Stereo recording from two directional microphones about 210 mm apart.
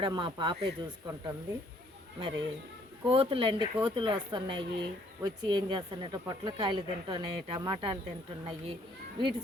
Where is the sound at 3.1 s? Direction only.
25° right (ahead or behind).